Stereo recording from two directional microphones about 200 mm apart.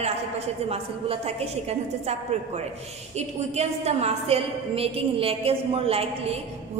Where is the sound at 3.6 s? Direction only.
35° right (ahead or behind).